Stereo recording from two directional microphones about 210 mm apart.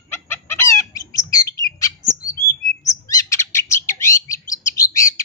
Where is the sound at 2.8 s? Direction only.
15° left (ahead or behind).